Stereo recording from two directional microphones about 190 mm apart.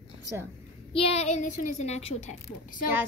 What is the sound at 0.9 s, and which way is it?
A woman's voice, 30° left (ahead or behind).